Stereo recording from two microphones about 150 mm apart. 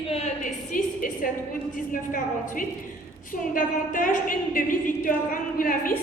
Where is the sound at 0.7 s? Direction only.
60° left (ahead or behind).